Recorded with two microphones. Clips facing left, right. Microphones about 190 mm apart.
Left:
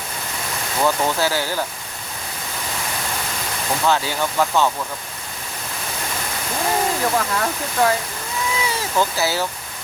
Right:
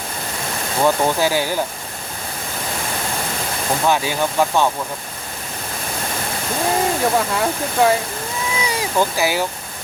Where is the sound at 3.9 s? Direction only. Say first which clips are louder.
Right 1 dB; 15° right (ahead or behind).